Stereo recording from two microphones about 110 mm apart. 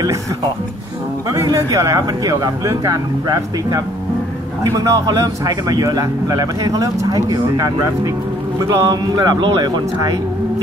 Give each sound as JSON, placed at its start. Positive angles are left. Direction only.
{"t": 1.3, "sound": "a man's voice", "side_deg": -30}